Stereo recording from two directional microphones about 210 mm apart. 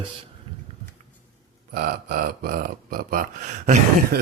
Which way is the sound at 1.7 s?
45° right (ahead or behind).